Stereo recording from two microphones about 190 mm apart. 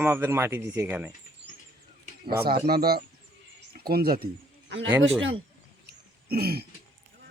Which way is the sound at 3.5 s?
55° right (ahead or behind).